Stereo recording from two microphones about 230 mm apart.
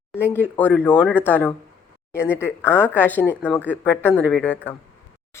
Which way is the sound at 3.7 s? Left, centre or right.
Centre.